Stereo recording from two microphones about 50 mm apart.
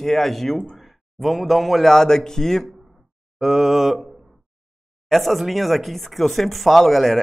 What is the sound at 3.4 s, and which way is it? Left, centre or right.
Speech, centre.